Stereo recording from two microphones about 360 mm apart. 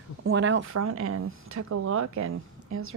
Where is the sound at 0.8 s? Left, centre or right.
Right.